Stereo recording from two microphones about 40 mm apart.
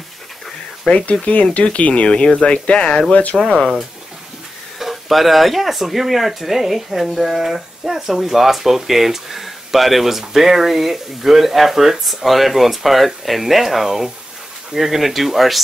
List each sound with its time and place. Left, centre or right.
0.9 s speech: centre
1.2 s speech: left
3.3 s speech: centre
4.7 s speech: centre